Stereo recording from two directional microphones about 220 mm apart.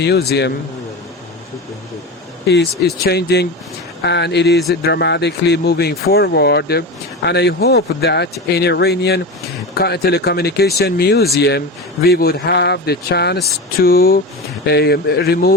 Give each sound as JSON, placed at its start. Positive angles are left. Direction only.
{"t": 0.0, "sound": "speech", "side_deg": 50}
{"t": 3.1, "sound": "speech", "side_deg": 50}